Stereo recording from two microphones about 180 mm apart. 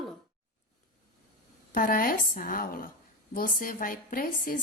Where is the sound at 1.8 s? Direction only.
50° left (ahead or behind).